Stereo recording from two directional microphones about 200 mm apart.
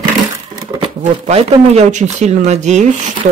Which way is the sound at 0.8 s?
35° right (ahead or behind).